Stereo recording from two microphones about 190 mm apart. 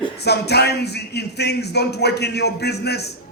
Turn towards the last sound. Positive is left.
turn(degrees=60)  # may be behind; listen again after turning